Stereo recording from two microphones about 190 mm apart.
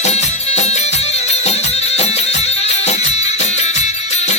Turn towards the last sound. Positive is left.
turn(degrees=35)  # may be behind; listen again after turning